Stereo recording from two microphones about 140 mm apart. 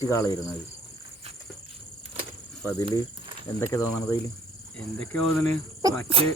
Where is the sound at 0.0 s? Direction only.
20° left (ahead or behind).